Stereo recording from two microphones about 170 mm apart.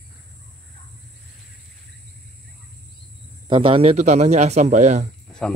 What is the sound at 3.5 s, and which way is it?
Speech, 30° right (ahead or behind).